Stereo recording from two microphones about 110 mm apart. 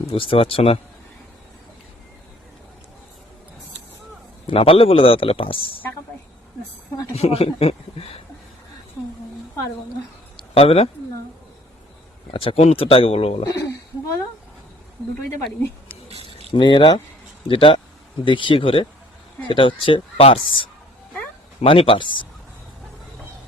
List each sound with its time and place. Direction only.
0.1 s a man's voice: 55° left (ahead or behind)
4.4 s a man's voice: 60° left (ahead or behind)
7.2 s a man's voice: 70° left (ahead or behind)
10.3 s a sound: 60° left (ahead or behind)
12.3 s a man's voice: 55° left (ahead or behind)
13.4 s speech: 30° left (ahead or behind)
16.5 s speech: 45° left (ahead or behind)